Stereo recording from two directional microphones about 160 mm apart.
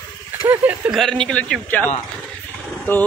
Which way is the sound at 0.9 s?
5° left (ahead or behind).